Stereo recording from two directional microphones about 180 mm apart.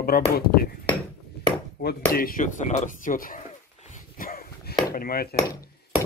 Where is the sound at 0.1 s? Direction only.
55° left (ahead or behind).